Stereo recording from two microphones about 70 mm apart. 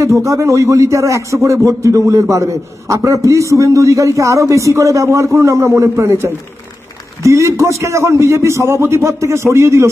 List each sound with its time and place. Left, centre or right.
0.2 s a man's voice: right